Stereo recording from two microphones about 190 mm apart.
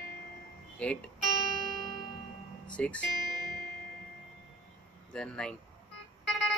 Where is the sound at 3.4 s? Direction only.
50° left (ahead or behind).